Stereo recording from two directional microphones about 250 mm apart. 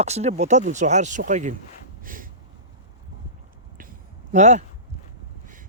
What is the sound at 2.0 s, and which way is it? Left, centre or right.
Snort, right.